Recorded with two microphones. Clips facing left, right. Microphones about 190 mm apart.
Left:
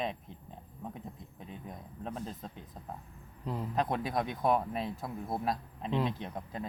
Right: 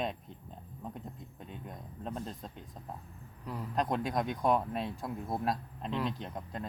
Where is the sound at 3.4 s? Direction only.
25° left (ahead or behind).